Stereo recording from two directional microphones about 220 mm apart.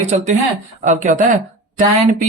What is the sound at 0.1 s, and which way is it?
Speech, 30° right (ahead or behind).